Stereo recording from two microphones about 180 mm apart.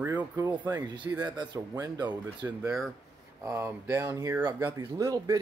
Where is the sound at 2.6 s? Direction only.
Centre (ahead or behind).